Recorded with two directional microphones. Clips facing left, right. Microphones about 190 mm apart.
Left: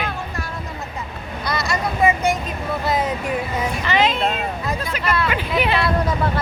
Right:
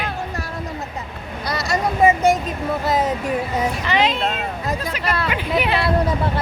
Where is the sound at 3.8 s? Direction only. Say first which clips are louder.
Left 2 dB; 15° right (ahead or behind).